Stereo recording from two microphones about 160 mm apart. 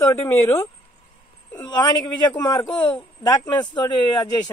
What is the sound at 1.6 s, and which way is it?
A man's voice, 30° left (ahead or behind).